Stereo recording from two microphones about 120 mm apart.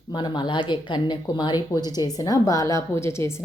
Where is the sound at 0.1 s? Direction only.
40° left (ahead or behind).